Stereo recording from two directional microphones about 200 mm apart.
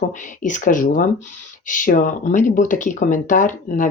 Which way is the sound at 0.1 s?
40° left (ahead or behind).